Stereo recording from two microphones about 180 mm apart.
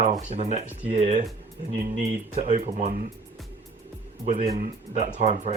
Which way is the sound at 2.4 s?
40° right (ahead or behind).